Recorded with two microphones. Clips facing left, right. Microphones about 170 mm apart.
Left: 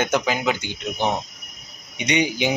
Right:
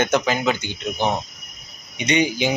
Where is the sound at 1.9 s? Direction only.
15° left (ahead or behind).